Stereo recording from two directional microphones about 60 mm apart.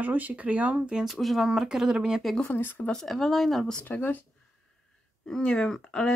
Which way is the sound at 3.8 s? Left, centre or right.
Left.